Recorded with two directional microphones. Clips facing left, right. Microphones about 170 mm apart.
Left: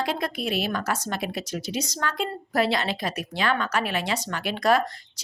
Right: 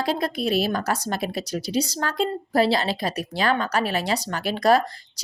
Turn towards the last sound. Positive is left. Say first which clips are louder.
# right 3 dB
turn(degrees=-35)  # may be behind; listen again after turning